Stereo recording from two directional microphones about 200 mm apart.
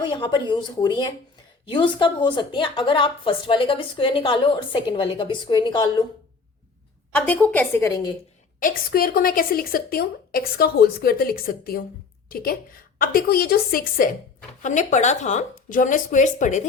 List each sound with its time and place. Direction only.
0.0 s a woman's voice: 25° left (ahead or behind)
7.1 s a woman's voice: 5° left (ahead or behind)
8.5 s a woman's voice: 45° left (ahead or behind)